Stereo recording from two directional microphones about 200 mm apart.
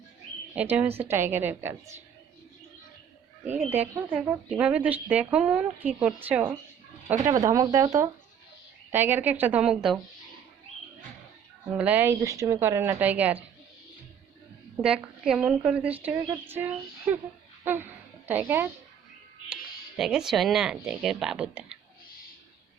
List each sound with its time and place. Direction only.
0.5 s speech: 5° right (ahead or behind)
3.7 s speech: 10° right (ahead or behind)
11.7 s speech: 5° right (ahead or behind)
14.8 s speech: 5° right (ahead or behind)
16.2 s speech: 20° right (ahead or behind)
16.6 s a woman's voice: 10° right (ahead or behind)
20.0 s speech: 5° right (ahead or behind)